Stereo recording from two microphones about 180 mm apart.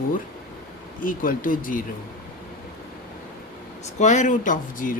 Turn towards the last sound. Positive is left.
turn(degrees=50)  # may be behind; listen again after turning